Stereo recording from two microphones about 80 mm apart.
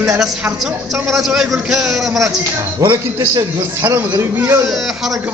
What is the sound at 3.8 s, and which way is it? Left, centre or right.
Speech, right.